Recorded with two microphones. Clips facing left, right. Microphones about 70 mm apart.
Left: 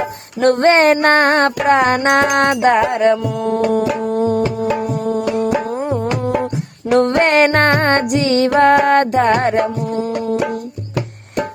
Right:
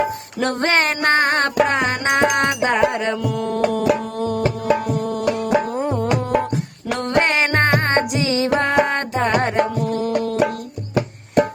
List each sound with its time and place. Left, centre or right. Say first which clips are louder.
0.3 s a sound: left 8 dB; left
2.7 s music: left 5 dB; left
4.0 s music: left 5 dB; left
6.9 s music: left 6 dB; left
9.9 s music: left 1 dB; left